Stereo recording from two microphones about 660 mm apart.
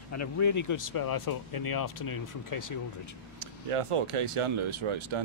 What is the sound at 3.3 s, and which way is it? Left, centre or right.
Speech, right.